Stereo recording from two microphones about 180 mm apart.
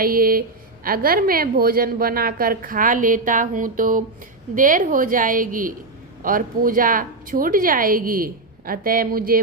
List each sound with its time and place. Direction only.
0.0 s a woman's voice: 55° right (ahead or behind)